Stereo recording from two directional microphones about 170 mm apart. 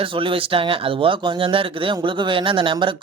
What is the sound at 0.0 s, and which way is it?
Speech, 30° right (ahead or behind).